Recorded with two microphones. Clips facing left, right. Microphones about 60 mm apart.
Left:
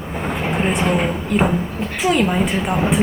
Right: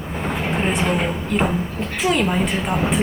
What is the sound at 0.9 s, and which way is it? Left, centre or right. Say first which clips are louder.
A woman's voice: left 2 dB; centre.